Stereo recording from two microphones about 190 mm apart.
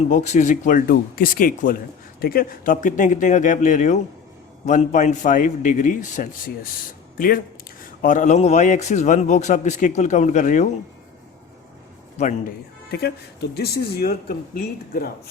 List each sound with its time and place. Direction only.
0.1 s a man's voice: 40° left (ahead or behind)
12.1 s a man's voice: 40° left (ahead or behind)
12.9 s speech: 60° left (ahead or behind)